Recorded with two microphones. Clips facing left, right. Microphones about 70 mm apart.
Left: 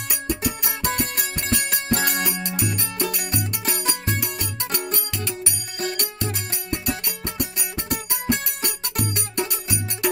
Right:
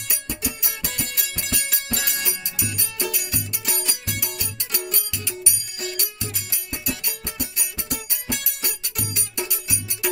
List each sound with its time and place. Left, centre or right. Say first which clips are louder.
0.1 s music: left 5 dB; left